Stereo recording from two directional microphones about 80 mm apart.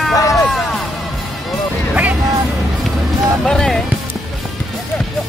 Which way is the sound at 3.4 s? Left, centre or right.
Centre.